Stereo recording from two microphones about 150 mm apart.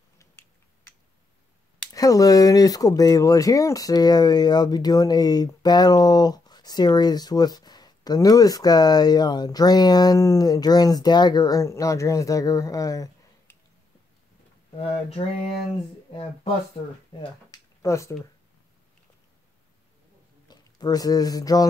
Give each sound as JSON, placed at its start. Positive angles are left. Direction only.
{"t": 2.0, "sound": "speech", "side_deg": 25}
{"t": 14.8, "sound": "a sound", "side_deg": 45}
{"t": 16.1, "sound": "speech", "side_deg": 40}
{"t": 17.8, "sound": "speech", "side_deg": 20}
{"t": 20.4, "sound": "speech", "side_deg": 25}